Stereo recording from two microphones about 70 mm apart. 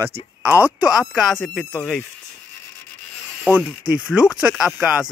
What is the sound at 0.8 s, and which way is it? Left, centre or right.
Speech, centre.